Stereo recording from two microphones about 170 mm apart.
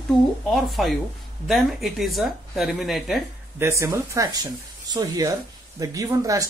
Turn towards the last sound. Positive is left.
turn(degrees=-20)  # may be behind; listen again after turning